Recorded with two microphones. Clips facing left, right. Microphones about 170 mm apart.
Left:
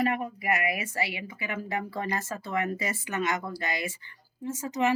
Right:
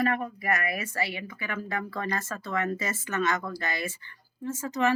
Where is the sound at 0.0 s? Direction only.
15° left (ahead or behind).